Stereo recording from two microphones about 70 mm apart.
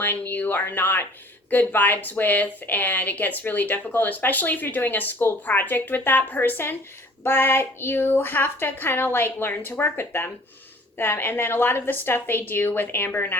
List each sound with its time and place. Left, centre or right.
0.0 s a woman's voice: left